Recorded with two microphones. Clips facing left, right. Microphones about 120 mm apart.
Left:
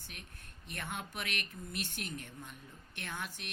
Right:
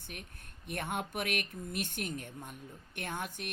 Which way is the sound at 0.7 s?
55° right (ahead or behind).